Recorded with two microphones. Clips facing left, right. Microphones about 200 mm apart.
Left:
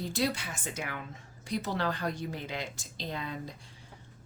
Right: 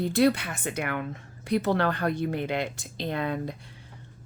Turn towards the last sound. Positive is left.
turn(degrees=-60)  # may be behind; listen again after turning